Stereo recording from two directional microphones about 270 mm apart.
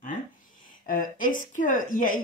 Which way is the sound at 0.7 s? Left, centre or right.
Left.